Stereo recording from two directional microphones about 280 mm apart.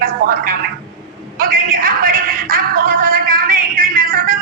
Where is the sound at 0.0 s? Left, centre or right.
Right.